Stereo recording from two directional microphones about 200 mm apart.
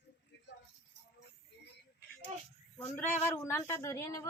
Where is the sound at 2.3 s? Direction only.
35° right (ahead or behind).